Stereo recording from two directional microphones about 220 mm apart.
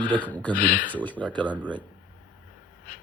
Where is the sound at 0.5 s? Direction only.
40° left (ahead or behind).